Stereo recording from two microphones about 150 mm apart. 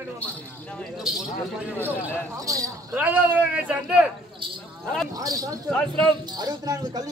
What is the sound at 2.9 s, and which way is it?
A man's voice, 10° right (ahead or behind).